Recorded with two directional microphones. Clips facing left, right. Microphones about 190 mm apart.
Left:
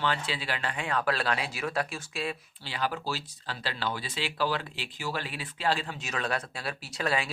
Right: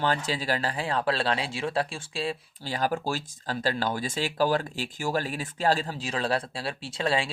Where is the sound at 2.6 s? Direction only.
45° right (ahead or behind).